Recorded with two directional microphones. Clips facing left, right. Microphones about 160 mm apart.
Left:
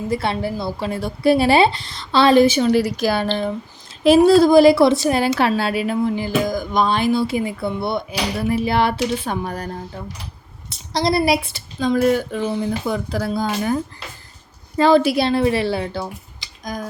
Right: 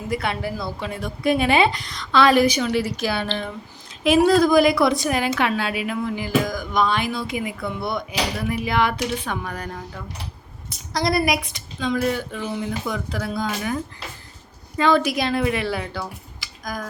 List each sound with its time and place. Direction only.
0.1 s a woman's voice: 30° left (ahead or behind)
11.5 s speech: 40° left (ahead or behind)
14.8 s speech: 35° left (ahead or behind)